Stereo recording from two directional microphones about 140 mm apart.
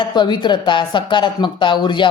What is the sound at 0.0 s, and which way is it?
Speech, 30° left (ahead or behind).